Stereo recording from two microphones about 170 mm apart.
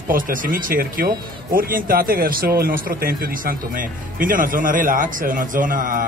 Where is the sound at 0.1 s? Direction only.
55° right (ahead or behind).